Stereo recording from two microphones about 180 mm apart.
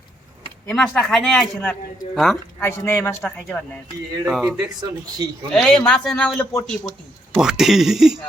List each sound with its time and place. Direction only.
0.7 s speech: 5° left (ahead or behind)
2.6 s speech: 15° left (ahead or behind); by 4.6 s 5° right (ahead or behind)
4.8 s speech: 20° right (ahead or behind)
5.5 s speech: centre (ahead or behind)
7.3 s speech: 5° right (ahead or behind)